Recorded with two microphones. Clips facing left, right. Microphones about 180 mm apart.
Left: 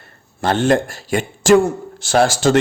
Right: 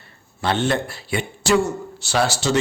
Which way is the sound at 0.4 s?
45° left (ahead or behind).